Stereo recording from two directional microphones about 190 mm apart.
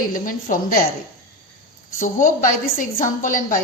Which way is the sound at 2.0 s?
45° left (ahead or behind).